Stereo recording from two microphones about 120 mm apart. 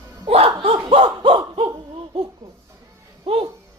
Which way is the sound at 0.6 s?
50° right (ahead or behind).